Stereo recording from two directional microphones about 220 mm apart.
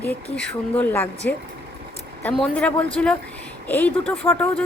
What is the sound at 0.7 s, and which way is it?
A woman's voice, 10° left (ahead or behind).